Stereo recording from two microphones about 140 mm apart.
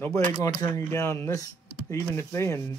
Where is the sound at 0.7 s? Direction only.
20° left (ahead or behind).